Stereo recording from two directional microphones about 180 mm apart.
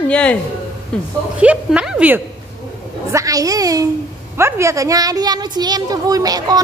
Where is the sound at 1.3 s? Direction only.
5° right (ahead or behind).